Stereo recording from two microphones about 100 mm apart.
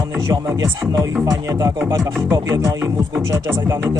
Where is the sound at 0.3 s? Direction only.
35° right (ahead or behind).